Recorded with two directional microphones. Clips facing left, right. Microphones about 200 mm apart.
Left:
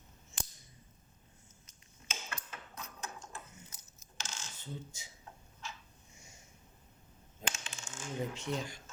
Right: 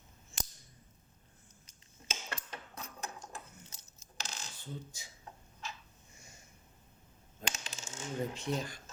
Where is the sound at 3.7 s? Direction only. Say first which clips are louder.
Right 1 dB; 35° right (ahead or behind).